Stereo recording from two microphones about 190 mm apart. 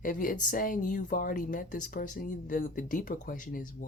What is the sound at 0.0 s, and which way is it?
Speech, 45° left (ahead or behind).